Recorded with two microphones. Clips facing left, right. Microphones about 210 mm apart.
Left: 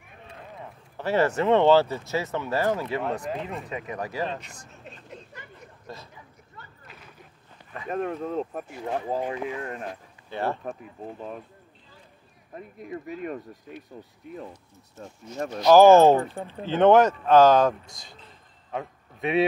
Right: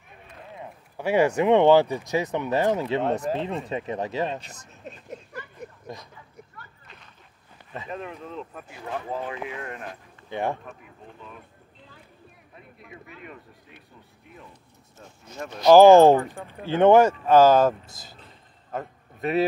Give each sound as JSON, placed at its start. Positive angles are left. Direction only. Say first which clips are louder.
{"t": 0.9, "sound": "speech", "louder": "right 2 dB", "side_deg": -15}
{"t": 5.9, "sound": "speech", "louder": "right 1 dB", "side_deg": -15}
{"t": 6.9, "sound": "a sound", "louder": "left 3 dB", "side_deg": 5}
{"t": 7.9, "sound": "speech", "louder": "left 8 dB", "side_deg": 50}
{"t": 10.3, "sound": "speech", "louder": "right 1 dB", "side_deg": -15}
{"t": 10.6, "sound": "speech", "louder": "left 8 dB", "side_deg": 45}
{"t": 12.5, "sound": "speech", "louder": "left 10 dB", "side_deg": 45}
{"t": 15.0, "sound": "speech", "louder": "left 5 dB", "side_deg": 40}
{"t": 15.6, "sound": "a man's voice", "louder": "right 2 dB", "side_deg": -15}